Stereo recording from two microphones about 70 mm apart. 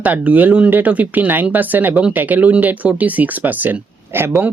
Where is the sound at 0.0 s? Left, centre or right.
Right.